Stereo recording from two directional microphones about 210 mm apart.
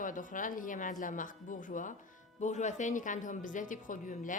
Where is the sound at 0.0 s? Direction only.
40° left (ahead or behind).